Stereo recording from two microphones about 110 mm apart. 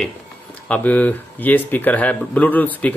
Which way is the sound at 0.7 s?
15° left (ahead or behind).